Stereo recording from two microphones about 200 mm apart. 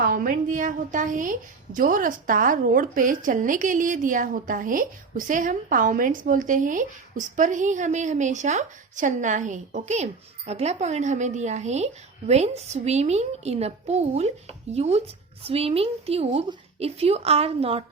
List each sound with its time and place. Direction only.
0.0 s a woman's voice: 45° right (ahead or behind); by 17.8 s 30° right (ahead or behind)